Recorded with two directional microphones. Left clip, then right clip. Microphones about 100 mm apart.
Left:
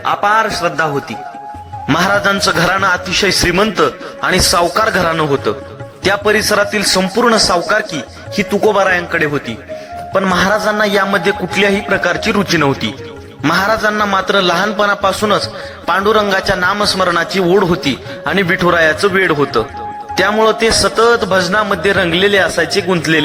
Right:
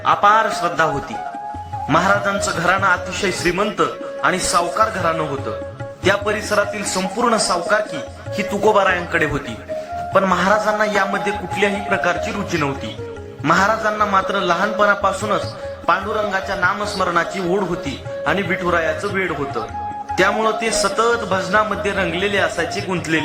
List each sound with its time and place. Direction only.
0.0 s speech: 40° left (ahead or behind)
1.9 s a man's voice: 80° left; by 7.8 s 55° left (ahead or behind)
8.4 s speech: 40° left (ahead or behind)
10.3 s a man's voice: 50° left (ahead or behind)
16.5 s a man's voice: 80° left
16.8 s a man's voice: 60° left (ahead or behind)
18.3 s a man's voice: 90° left
19.3 s a man's voice: 65° left (ahead or behind)